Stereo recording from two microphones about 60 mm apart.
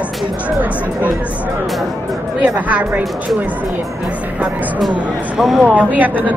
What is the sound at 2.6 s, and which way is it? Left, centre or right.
Speech, right.